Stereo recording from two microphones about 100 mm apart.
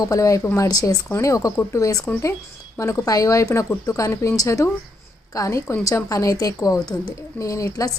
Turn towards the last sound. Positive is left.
turn(degrees=35)  # may be behind; listen again after turning